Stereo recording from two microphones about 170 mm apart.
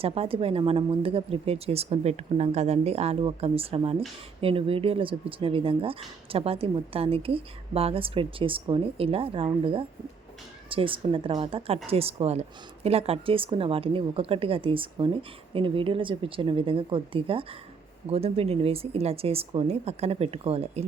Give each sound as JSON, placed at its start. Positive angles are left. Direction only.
{"t": 0.0, "sound": "speech", "side_deg": -35}